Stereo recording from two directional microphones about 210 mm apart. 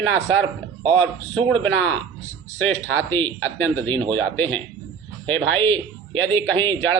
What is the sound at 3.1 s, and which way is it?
Speech, 10° left (ahead or behind).